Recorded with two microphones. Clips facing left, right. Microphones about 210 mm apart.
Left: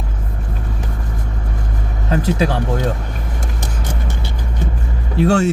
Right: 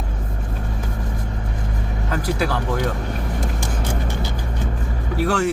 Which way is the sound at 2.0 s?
25° left (ahead or behind).